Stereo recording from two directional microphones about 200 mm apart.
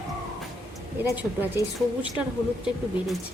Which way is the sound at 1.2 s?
10° right (ahead or behind).